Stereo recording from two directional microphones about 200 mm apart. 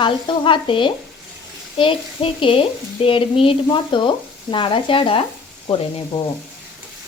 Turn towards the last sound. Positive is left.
turn(degrees=25)  # may be behind; listen again after turning